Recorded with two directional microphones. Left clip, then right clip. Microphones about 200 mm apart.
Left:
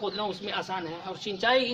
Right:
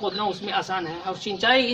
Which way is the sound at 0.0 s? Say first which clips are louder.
Right 5 dB; 15° left (ahead or behind).